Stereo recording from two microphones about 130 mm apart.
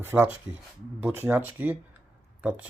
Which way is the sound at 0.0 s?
15° right (ahead or behind).